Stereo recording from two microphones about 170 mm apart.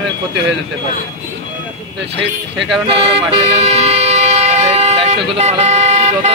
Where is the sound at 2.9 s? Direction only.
35° right (ahead or behind).